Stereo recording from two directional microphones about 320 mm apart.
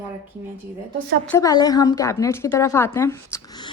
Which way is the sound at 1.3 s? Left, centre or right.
Centre.